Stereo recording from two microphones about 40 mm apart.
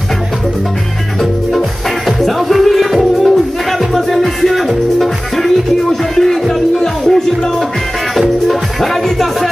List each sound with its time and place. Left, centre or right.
2.0 s music: centre